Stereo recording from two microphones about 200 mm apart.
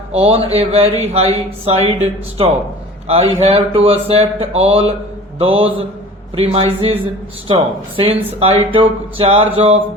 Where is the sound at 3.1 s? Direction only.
30° right (ahead or behind).